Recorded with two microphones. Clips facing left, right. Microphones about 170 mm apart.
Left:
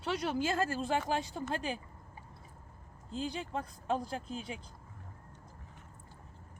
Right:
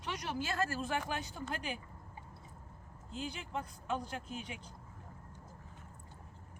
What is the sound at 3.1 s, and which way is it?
Speech, 35° left (ahead or behind).